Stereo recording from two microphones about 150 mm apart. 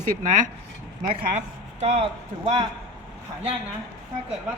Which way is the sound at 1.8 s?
45° right (ahead or behind).